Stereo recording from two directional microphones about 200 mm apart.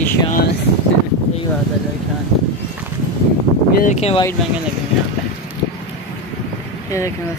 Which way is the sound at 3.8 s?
35° left (ahead or behind).